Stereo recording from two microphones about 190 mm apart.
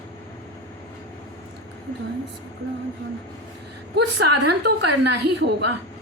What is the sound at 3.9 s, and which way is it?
A woman's voice, 60° right (ahead or behind).